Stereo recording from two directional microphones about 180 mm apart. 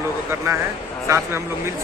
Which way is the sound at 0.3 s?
15° right (ahead or behind).